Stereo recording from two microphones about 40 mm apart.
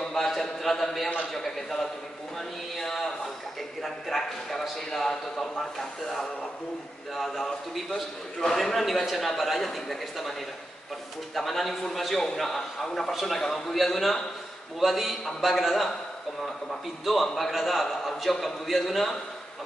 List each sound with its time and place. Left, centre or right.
0.1 s a sound: centre
1.3 s speech: centre
7.2 s a man's voice: centre
7.9 s speech: centre
8.5 s a man's voice: centre
11.3 s a man's voice: centre
14.8 s a man's voice: centre
17.0 s a man's voice: centre